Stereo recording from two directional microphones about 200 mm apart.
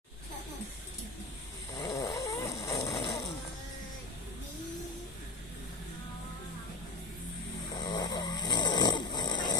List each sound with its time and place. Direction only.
1.7 s snoring: 20° left (ahead or behind)
3.0 s snoring: 25° left (ahead or behind)
7.7 s snoring: 20° left (ahead or behind)